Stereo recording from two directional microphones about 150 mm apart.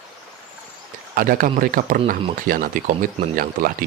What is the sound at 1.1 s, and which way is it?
Speech, 70° right (ahead or behind).